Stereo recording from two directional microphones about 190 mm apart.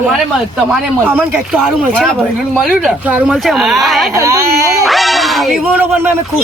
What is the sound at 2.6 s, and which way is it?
Speech, centre (ahead or behind).